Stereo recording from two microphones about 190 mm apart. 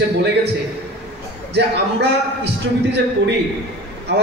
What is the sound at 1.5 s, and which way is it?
A man's voice, 65° right (ahead or behind).